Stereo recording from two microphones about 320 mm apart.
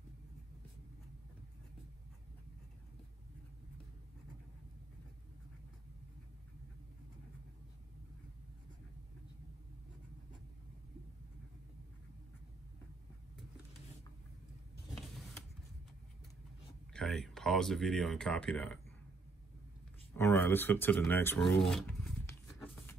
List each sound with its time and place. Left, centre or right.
16.9 s speech: centre
20.2 s speech: centre